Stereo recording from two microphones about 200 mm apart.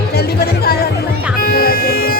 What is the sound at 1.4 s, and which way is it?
Music, 45° left (ahead or behind).